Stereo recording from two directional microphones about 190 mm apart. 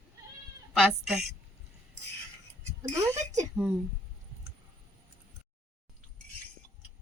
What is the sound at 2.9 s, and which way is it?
Speech, 15° right (ahead or behind).